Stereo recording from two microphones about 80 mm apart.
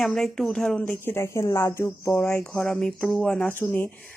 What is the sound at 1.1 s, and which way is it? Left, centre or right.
Speech, left.